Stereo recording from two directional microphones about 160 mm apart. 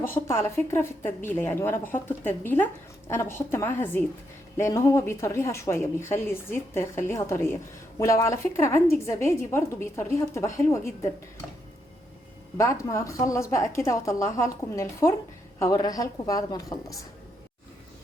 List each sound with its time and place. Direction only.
0.0 s a woman's voice: 15° left (ahead or behind)
12.5 s a woman's voice: 20° left (ahead or behind)